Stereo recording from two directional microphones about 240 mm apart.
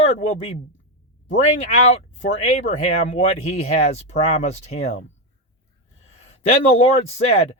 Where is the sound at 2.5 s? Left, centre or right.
Left.